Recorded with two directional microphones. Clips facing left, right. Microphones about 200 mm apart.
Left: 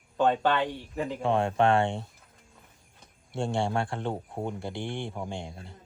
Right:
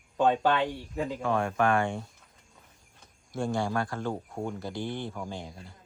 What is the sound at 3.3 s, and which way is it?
Speech, 30° left (ahead or behind).